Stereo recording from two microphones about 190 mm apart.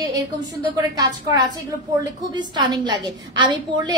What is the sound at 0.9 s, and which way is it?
A woman's voice, 20° right (ahead or behind).